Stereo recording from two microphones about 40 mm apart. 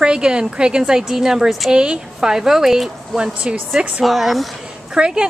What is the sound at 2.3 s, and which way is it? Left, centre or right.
Speech, centre.